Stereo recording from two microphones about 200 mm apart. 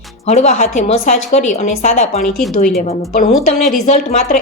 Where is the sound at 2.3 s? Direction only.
5° left (ahead or behind).